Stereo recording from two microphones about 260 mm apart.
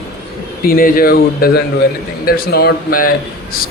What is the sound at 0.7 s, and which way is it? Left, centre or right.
Speech, left.